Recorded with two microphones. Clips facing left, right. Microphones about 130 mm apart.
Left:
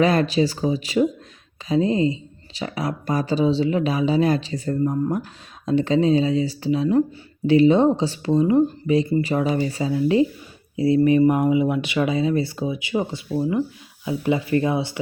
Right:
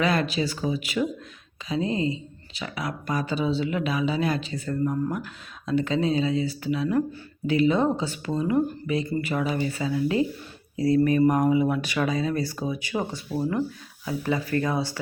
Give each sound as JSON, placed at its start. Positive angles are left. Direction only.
{"t": 0.0, "sound": "speech", "side_deg": 40}
{"t": 4.8, "sound": "speech", "side_deg": 25}
{"t": 5.1, "sound": "speech", "side_deg": 40}